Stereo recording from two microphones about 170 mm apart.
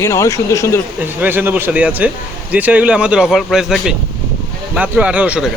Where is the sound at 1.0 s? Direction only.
10° right (ahead or behind).